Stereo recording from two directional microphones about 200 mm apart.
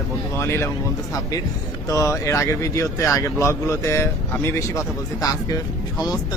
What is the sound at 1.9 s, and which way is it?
Speech, 15° left (ahead or behind).